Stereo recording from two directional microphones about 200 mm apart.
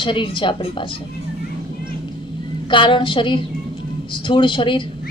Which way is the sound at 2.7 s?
25° left (ahead or behind).